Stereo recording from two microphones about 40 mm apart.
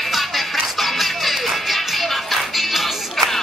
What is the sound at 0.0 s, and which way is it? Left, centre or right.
Music, centre.